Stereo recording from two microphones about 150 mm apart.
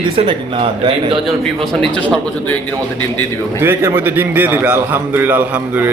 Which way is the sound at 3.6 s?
15° right (ahead or behind).